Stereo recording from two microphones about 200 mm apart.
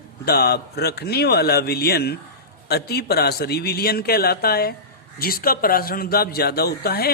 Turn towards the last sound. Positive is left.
turn(degrees=50)  # may be behind; listen again after turning